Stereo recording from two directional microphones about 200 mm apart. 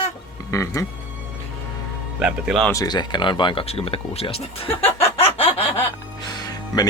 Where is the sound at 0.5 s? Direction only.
15° left (ahead or behind).